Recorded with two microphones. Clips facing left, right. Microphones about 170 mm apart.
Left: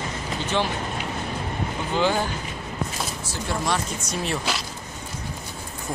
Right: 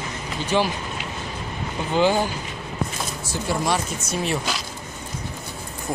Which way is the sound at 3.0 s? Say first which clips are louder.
Right 2 dB; 5° right (ahead or behind).